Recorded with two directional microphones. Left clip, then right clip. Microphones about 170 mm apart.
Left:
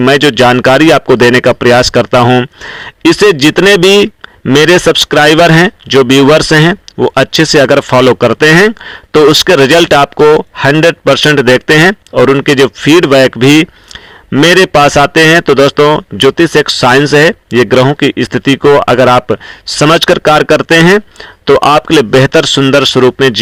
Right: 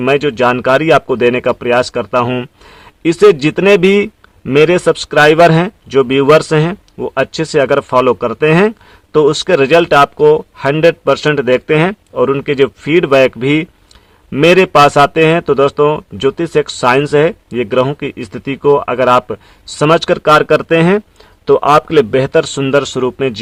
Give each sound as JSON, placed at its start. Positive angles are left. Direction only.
{"t": 0.0, "sound": "speech", "side_deg": 35}
{"t": 2.2, "sound": "speech", "side_deg": 15}
{"t": 2.6, "sound": "speech", "side_deg": 25}
{"t": 11.1, "sound": "speech", "side_deg": 25}
{"t": 19.6, "sound": "speech", "side_deg": 25}